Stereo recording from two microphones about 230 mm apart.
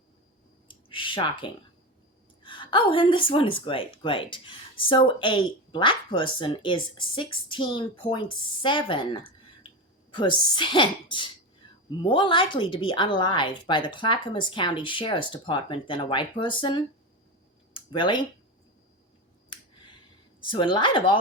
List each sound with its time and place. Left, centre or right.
0.9 s clicking: left
2.4 s a woman's voice: left
20.4 s a woman's voice: left